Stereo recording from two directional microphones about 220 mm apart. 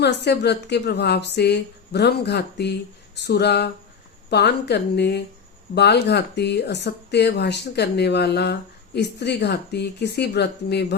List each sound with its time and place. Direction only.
0.0 s speech: 50° left (ahead or behind)